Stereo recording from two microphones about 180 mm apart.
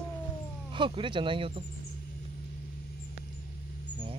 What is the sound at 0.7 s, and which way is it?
Speech, 30° right (ahead or behind).